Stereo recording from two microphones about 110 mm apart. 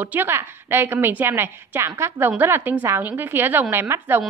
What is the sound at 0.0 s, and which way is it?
A woman's voice, 20° right (ahead or behind).